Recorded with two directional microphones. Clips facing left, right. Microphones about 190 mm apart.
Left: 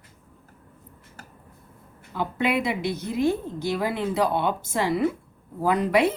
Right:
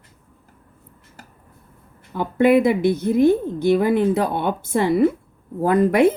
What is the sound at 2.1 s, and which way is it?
A woman's voice, 50° right (ahead or behind).